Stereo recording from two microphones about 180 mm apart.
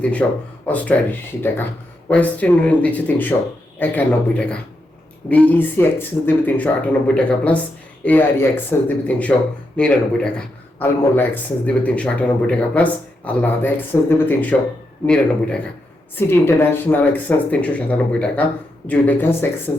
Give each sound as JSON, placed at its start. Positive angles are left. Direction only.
{"t": 0.0, "sound": "a man's voice", "side_deg": 5}
{"t": 2.0, "sound": "a man's voice", "side_deg": 10}